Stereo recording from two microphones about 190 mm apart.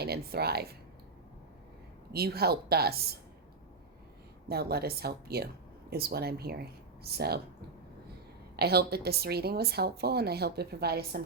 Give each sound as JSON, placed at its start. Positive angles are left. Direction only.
{"t": 0.0, "sound": "speech", "side_deg": -55}
{"t": 2.1, "sound": "speech", "side_deg": -55}
{"t": 4.4, "sound": "speech", "side_deg": -55}
{"t": 8.5, "sound": "speech", "side_deg": -55}